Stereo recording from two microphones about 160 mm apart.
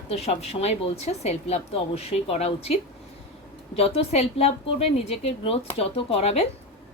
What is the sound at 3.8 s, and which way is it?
A woman's voice, 40° left (ahead or behind).